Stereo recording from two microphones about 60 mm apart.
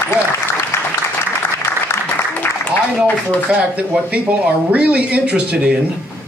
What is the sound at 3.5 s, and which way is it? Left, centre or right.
Speech, right.